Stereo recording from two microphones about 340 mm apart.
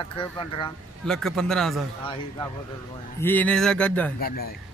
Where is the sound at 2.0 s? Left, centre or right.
Centre.